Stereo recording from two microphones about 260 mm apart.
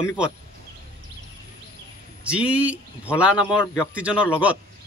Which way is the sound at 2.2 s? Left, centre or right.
Centre.